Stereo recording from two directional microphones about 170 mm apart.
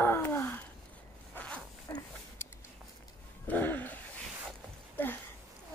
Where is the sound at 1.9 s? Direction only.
20° left (ahead or behind).